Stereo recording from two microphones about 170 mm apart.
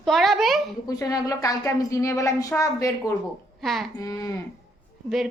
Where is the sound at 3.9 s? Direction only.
20° left (ahead or behind).